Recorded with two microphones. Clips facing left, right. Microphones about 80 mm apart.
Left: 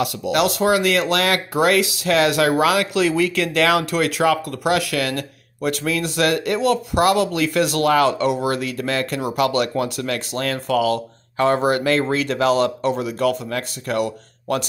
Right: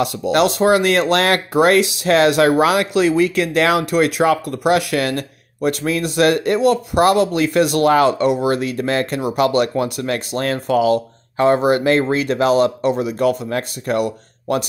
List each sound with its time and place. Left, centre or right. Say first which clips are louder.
0.0 s speech: right 3 dB; right